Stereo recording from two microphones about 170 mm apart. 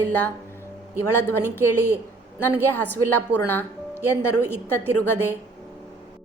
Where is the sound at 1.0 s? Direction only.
15° left (ahead or behind).